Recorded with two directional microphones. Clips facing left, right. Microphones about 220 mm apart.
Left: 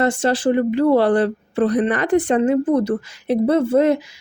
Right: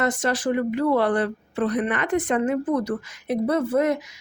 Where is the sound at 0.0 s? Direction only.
30° left (ahead or behind).